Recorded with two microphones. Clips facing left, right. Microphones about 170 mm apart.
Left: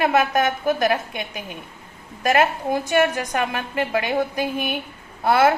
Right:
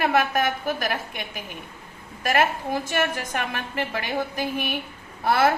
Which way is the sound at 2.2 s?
25° left (ahead or behind).